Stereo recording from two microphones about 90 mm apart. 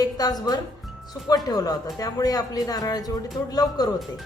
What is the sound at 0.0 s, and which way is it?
Speech, 45° left (ahead or behind).